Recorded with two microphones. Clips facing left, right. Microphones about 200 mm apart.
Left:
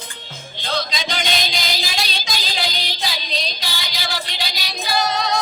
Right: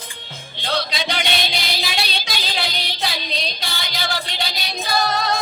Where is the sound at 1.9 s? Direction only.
60° right (ahead or behind).